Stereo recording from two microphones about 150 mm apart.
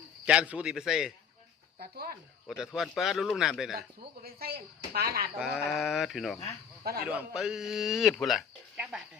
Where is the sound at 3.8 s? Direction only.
90° right.